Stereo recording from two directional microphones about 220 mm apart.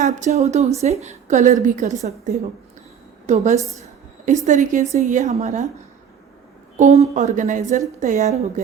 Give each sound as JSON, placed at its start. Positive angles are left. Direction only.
{"t": 0.0, "sound": "a woman's voice", "side_deg": -30}
{"t": 6.7, "sound": "a woman's voice", "side_deg": -30}